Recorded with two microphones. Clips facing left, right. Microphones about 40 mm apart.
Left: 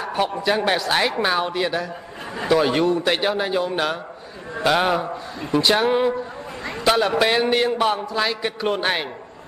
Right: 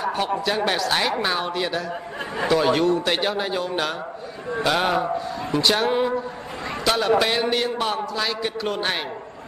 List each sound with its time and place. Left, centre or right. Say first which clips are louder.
0.0 s a man's voice: left 1 dB; centre